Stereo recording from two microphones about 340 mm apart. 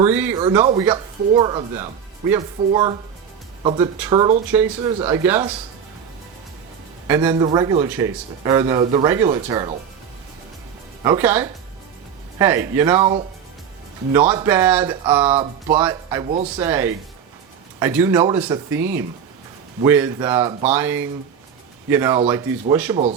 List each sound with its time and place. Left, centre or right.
0.0 s a man's voice: centre
7.1 s a man's voice: centre
11.0 s a man's voice: centre